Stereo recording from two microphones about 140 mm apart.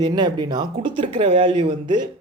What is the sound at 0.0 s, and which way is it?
Speech, 30° right (ahead or behind).